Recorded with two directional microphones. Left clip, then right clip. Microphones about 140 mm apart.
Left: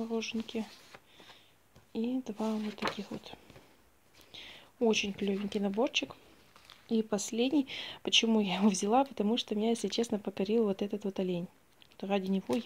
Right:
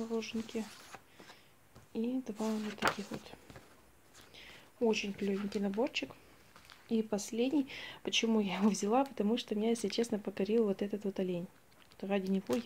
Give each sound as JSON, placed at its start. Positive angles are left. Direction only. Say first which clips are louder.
{"t": 0.0, "sound": "speech", "louder": "left 2 dB", "side_deg": 45}
{"t": 1.9, "sound": "speech", "louder": "left 2 dB", "side_deg": 35}
{"t": 3.1, "sound": "speech", "louder": "left 1 dB", "side_deg": -20}
{"t": 4.3, "sound": "speech", "louder": "left 6 dB", "side_deg": 45}